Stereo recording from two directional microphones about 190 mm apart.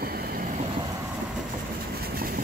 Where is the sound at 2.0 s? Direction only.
50° right (ahead or behind).